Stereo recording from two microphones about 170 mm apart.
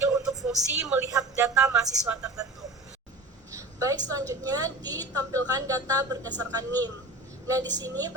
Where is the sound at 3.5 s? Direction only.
20° right (ahead or behind).